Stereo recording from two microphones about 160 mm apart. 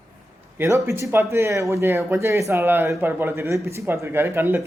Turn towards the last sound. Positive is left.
turn(degrees=-15)  # may be behind; listen again after turning